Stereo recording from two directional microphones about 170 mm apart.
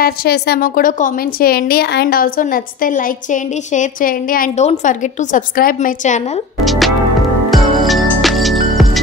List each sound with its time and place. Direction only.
0.0 s a woman's voice: 70° left (ahead or behind)
4.6 s a woman's voice: 45° left (ahead or behind)
6.6 s music: centre (ahead or behind)